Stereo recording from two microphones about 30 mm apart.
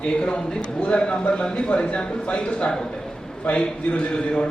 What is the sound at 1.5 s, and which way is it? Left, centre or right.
A man's voice, left.